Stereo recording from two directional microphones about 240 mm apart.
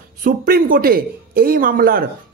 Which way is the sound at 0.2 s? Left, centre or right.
Right.